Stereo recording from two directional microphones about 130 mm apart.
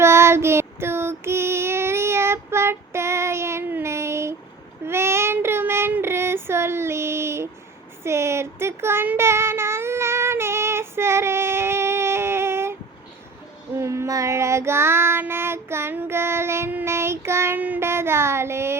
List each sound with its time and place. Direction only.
0.0 s child singing: 20° right (ahead or behind)
13.7 s child singing: 20° right (ahead or behind)